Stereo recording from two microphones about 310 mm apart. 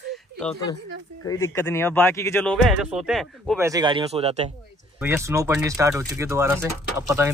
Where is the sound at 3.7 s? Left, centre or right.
Centre.